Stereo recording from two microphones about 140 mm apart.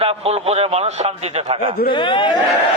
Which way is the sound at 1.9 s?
35° left (ahead or behind).